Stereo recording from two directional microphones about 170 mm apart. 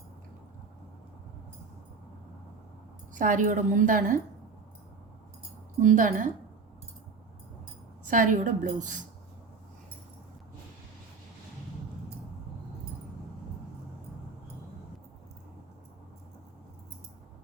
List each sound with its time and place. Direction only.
3.2 s a woman's voice: 50° right (ahead or behind)
5.8 s a woman's voice: 50° right (ahead or behind)
8.0 s a woman's voice: 50° right (ahead or behind)